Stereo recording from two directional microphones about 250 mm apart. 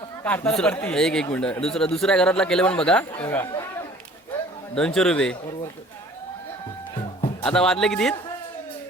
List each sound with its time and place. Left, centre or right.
0.3 s speech: centre
4.7 s speech: centre
7.4 s speech: centre